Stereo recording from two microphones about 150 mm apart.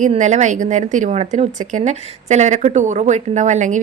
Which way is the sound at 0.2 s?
55° right (ahead or behind).